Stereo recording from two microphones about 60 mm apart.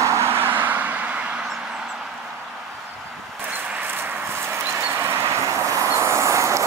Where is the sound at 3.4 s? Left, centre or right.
Right.